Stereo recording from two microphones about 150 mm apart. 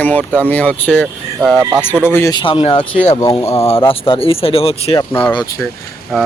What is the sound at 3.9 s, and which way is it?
Speech, 35° left (ahead or behind).